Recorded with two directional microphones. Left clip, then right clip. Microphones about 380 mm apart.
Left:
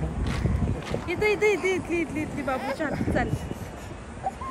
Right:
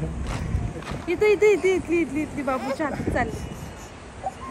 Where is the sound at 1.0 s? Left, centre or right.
Centre.